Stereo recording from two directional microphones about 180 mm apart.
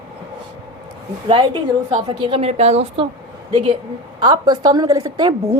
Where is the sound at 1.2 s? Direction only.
30° right (ahead or behind).